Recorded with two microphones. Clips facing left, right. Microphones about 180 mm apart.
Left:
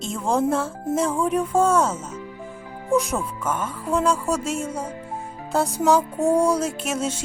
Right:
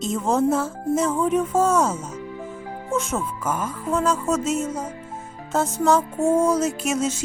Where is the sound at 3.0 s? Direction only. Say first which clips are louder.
Even; 5° right (ahead or behind).